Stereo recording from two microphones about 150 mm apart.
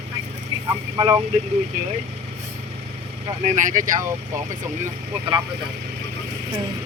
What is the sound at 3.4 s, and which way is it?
Speech, 55° right (ahead or behind).